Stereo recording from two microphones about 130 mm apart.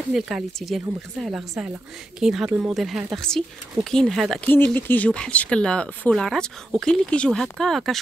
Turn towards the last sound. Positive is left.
turn(degrees=0)  # may be behind; listen again after turning